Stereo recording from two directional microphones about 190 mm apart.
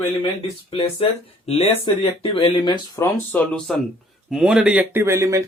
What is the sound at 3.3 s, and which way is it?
Speech, 5° left (ahead or behind).